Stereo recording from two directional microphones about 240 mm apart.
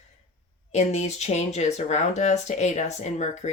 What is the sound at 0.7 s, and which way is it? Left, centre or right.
Speech, left.